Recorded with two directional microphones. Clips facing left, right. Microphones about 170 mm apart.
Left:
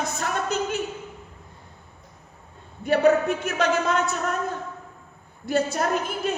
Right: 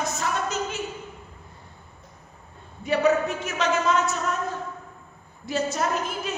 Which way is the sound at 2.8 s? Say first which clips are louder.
Left 3 dB; 55° left (ahead or behind).